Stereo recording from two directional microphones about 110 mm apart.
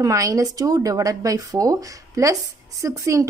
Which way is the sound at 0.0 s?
30° right (ahead or behind).